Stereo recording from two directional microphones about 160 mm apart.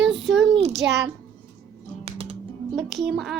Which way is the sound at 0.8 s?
15° right (ahead or behind).